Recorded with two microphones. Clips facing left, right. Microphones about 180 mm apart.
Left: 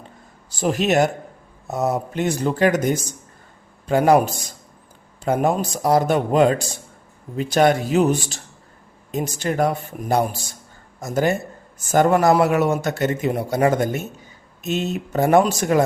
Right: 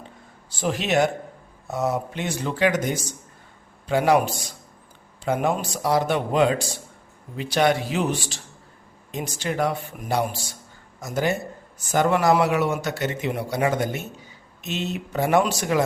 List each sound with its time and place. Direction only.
0.6 s a man's voice: 45° left (ahead or behind)